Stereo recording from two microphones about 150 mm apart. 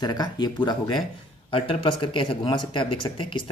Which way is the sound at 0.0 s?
25° left (ahead or behind).